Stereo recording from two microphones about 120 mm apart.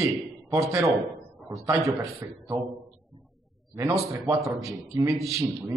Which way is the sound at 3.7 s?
25° right (ahead or behind).